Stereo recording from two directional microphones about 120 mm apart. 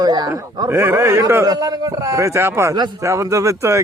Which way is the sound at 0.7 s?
20° right (ahead or behind).